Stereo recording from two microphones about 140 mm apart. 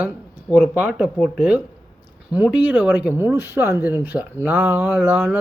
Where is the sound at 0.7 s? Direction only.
10° right (ahead or behind).